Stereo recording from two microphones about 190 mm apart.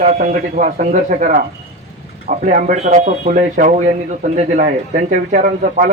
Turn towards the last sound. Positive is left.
turn(degrees=-40)  # may be behind; listen again after turning